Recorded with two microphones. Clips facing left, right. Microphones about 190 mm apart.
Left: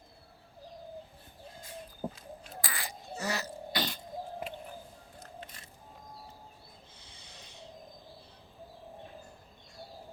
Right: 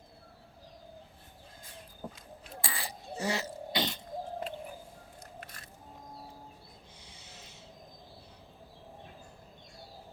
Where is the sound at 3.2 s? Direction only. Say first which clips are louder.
Right 2 dB; 25° right (ahead or behind).